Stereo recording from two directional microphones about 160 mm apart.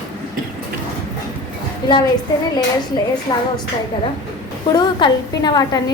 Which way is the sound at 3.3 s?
25° left (ahead or behind).